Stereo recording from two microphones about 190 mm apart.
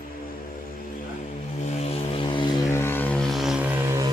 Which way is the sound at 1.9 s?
30° left (ahead or behind).